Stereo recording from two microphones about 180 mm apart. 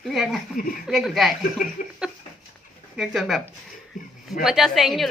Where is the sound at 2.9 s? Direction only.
Centre (ahead or behind).